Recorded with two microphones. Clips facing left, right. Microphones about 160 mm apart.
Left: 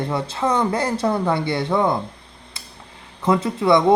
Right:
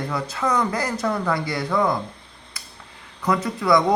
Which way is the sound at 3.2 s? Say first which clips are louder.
Left 4 dB; 25° left (ahead or behind).